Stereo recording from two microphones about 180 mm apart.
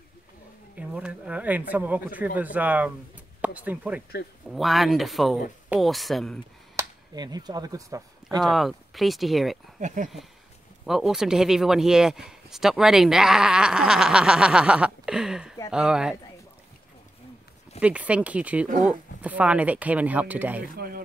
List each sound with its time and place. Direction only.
0.7 s speech: 5° right (ahead or behind)
6.8 s speech: 20° right (ahead or behind)
8.4 s speech: centre (ahead or behind)
9.8 s speech: 45° right (ahead or behind)
10.9 s speech: 5° right (ahead or behind)
17.7 s speech: 5° right (ahead or behind)
20.6 s speech: 55° right (ahead or behind)